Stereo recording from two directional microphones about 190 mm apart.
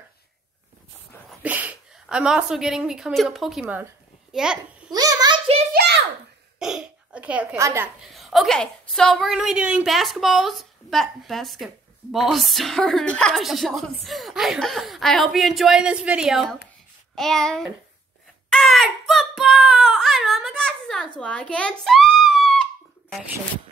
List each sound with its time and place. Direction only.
1.4 s a woman's voice: 10° right (ahead or behind)
4.9 s a sound: 20° right (ahead or behind)
5.7 s a sound: 60° right (ahead or behind)
6.6 s a child's voice: 5° right (ahead or behind)
8.1 s a woman's voice: centre (ahead or behind)
18.5 s child singing: centre (ahead or behind)